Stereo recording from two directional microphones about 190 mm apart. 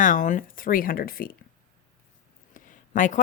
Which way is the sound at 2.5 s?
45° left (ahead or behind).